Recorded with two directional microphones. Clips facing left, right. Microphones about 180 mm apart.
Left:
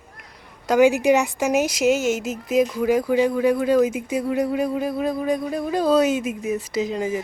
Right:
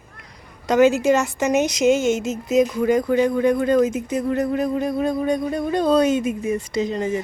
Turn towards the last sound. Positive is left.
turn(degrees=10)  # may be behind; listen again after turning